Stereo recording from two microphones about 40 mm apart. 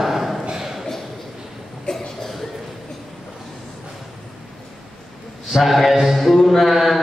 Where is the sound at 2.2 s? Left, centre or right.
Centre.